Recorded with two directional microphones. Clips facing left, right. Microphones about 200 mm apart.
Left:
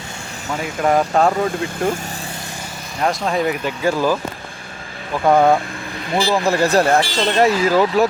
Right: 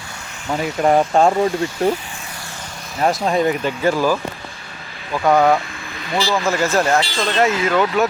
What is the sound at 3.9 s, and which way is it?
Speech, 10° right (ahead or behind).